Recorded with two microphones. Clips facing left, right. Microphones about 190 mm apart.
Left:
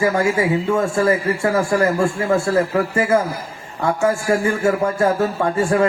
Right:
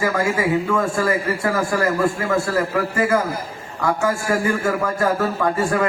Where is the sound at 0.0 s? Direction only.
25° left (ahead or behind).